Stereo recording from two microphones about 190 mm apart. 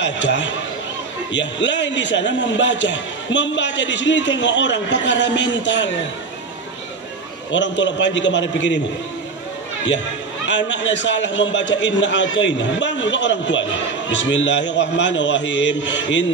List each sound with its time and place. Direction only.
0.0 s a man's voice: 70° left (ahead or behind)
7.5 s a man's voice: 70° left (ahead or behind)
10.4 s a man's voice: 75° left (ahead or behind)